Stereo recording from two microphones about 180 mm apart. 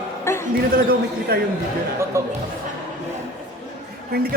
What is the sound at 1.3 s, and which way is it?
Speech, 55° right (ahead or behind).